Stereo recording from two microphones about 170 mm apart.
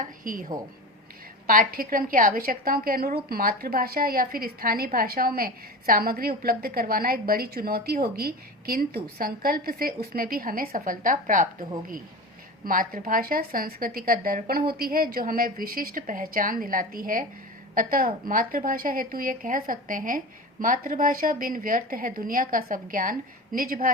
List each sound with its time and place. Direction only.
0.0 s a woman's voice: 50° right (ahead or behind)
12.6 s a woman's voice: 55° right (ahead or behind)